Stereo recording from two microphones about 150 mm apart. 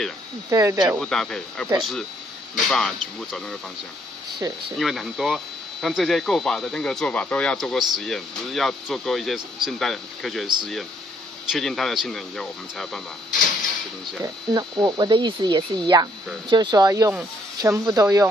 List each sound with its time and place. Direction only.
0.5 s speech: 25° right (ahead or behind)
0.9 s speech: 5° left (ahead or behind)
4.7 s speech: centre (ahead or behind)
14.2 s speech: 30° right (ahead or behind)